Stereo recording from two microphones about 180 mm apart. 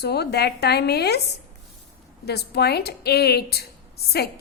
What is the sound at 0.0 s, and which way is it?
A woman's voice, 65° left (ahead or behind).